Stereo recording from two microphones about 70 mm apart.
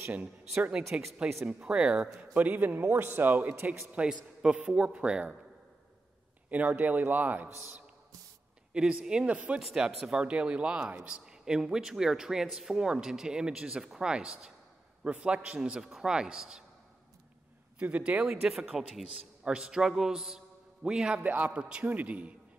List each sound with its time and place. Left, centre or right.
0.1 s speech: centre
2.3 s a man's voice: right
3.9 s speech: centre
6.5 s speech: right
8.7 s speech: centre
9.6 s speech: centre
17.7 s speech: centre
18.2 s speech: centre
21.2 s speech: right
21.5 s speech: centre